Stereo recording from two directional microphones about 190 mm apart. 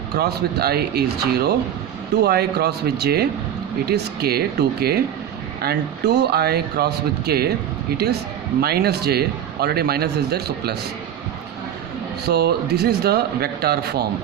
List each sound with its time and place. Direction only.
0.2 s a man's voice: 55° right (ahead or behind)
8.6 s a man's voice: 55° right (ahead or behind)
12.3 s a man's voice: 55° right (ahead or behind)